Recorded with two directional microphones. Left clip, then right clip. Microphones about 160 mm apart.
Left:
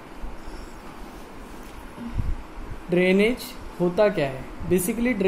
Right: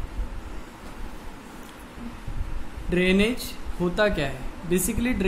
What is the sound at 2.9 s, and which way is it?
A man's voice, 10° right (ahead or behind).